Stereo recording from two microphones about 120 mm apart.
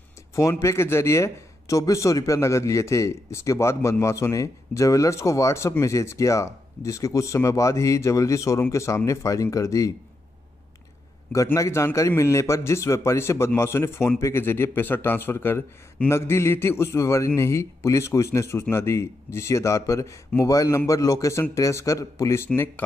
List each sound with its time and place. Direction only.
0.4 s speech: 25° left (ahead or behind)
11.5 s speech: 25° left (ahead or behind)